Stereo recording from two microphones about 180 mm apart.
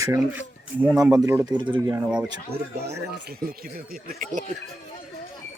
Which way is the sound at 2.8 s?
65° right (ahead or behind).